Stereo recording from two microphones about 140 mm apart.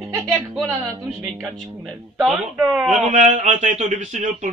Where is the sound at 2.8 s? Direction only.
60° right (ahead or behind).